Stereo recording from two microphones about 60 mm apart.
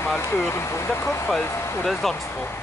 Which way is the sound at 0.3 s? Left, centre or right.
Left.